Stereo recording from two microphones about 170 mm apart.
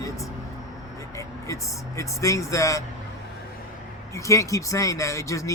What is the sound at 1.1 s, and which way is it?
Speech, 20° left (ahead or behind).